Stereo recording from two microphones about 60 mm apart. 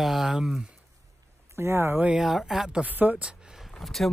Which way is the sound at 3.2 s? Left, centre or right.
Centre.